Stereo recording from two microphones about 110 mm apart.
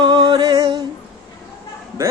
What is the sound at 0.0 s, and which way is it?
Music, 45° right (ahead or behind).